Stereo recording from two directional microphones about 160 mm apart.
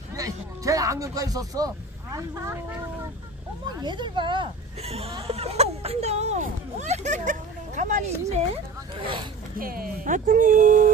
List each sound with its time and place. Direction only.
0.1 s speech: 20° right (ahead or behind)
3.6 s speech: 30° right (ahead or behind); by 8.4 s 50° right (ahead or behind)
8.9 s a sound: 35° right (ahead or behind)
9.6 s speech: 60° right (ahead or behind)